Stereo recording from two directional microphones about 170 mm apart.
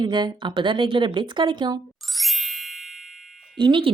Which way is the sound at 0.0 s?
25° right (ahead or behind).